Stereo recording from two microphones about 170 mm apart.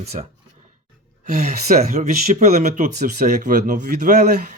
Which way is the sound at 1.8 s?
40° right (ahead or behind).